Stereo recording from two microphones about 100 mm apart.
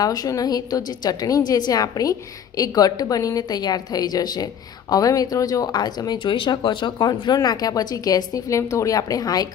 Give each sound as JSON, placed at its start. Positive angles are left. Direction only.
{"t": 0.0, "sound": "speech", "side_deg": 40}